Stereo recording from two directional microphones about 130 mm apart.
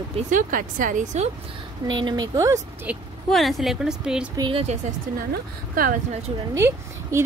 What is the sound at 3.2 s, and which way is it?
A woman's voice, centre (ahead or behind).